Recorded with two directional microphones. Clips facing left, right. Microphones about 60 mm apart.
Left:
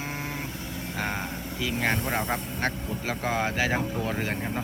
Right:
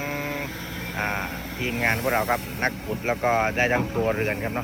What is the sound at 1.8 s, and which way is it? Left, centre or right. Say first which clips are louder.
Speech: right 5 dB; right.